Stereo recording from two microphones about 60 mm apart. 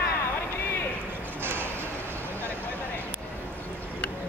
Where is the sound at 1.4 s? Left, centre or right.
Right.